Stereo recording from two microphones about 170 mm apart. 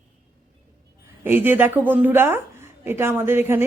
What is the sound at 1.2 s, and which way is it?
A woman's voice, 10° right (ahead or behind).